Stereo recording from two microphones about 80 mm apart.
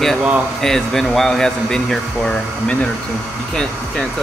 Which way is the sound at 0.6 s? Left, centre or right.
Centre.